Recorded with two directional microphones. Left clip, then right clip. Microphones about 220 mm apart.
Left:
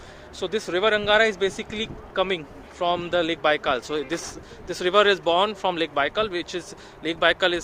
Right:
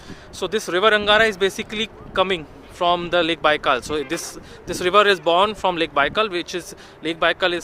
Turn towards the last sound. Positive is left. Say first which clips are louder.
# right 1 dB
turn(degrees=-10)  # may be behind; listen again after turning